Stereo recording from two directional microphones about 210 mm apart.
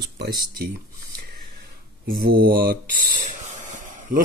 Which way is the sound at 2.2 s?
45° right (ahead or behind).